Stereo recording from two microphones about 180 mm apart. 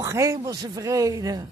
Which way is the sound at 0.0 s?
15° right (ahead or behind).